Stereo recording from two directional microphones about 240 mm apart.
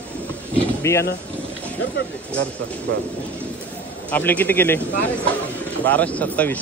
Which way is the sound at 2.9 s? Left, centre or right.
Right.